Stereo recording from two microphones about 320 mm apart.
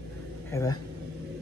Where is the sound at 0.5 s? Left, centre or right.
Centre.